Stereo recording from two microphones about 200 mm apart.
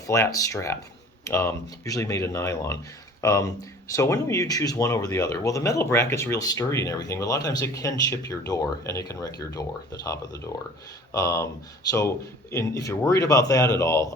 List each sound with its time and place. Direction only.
0.1 s speech: 15° left (ahead or behind)